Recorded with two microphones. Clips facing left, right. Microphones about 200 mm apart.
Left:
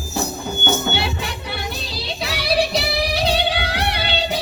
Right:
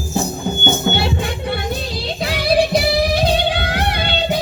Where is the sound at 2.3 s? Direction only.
50° right (ahead or behind).